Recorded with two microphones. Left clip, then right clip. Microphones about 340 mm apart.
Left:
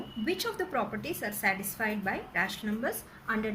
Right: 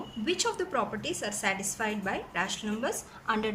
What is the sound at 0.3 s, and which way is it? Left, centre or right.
A woman's voice, centre.